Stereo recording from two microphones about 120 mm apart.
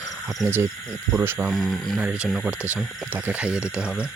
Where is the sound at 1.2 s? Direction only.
15° right (ahead or behind).